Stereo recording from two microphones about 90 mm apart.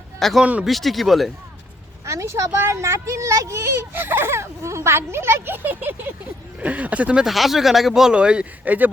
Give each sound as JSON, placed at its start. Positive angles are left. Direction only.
{"t": 0.2, "sound": "speech", "side_deg": 5}
{"t": 2.0, "sound": "speech", "side_deg": -35}
{"t": 7.3, "sound": "speech", "side_deg": 0}